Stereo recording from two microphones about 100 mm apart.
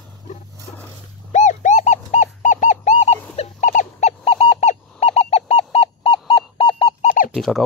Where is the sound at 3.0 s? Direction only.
90° left.